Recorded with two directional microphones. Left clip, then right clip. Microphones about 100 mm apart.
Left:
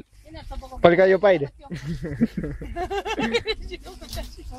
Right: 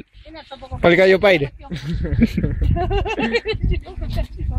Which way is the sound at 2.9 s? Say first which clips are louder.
Right 3 dB; 5° right (ahead or behind).